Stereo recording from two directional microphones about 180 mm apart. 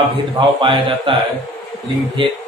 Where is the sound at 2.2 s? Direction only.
25° right (ahead or behind).